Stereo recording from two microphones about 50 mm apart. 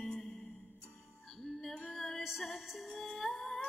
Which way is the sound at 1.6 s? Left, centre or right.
Centre.